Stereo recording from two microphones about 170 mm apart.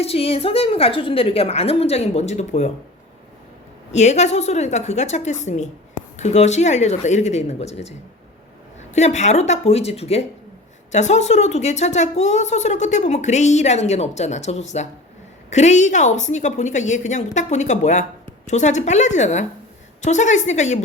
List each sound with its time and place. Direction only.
0.0 s a woman's voice: 35° left (ahead or behind)
3.9 s a woman's voice: 40° left (ahead or behind)
9.0 s a woman's voice: 45° left (ahead or behind)